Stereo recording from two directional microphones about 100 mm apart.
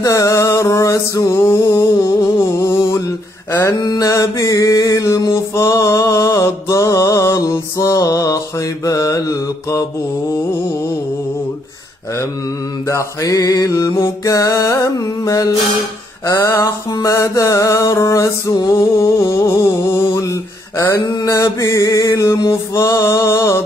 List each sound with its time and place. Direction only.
0.0 s music: 35° left (ahead or behind)
3.8 s mantra: 35° left (ahead or behind)
12.8 s music: 30° left (ahead or behind)
16.4 s a sound: 25° left (ahead or behind)
16.9 s music: 35° left (ahead or behind)
18.5 s music: 50° left (ahead or behind)
19.8 s music: 30° left (ahead or behind)
20.1 s a sound: 35° left (ahead or behind)
21.0 s music: 40° left (ahead or behind)